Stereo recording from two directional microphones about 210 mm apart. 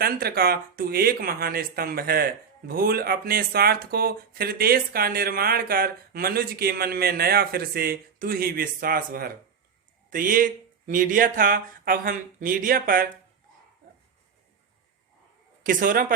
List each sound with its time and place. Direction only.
0.0 s speech: 45° right (ahead or behind)
15.6 s speech: 40° right (ahead or behind)